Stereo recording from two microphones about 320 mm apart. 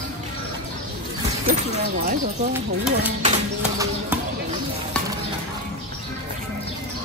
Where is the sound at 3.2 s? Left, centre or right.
Centre.